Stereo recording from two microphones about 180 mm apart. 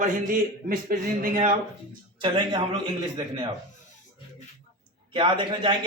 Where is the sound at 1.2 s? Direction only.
45° right (ahead or behind).